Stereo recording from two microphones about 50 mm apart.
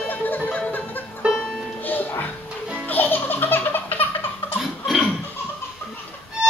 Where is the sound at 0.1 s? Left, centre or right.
Left.